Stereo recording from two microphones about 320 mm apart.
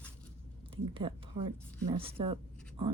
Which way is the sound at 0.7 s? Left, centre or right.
Centre.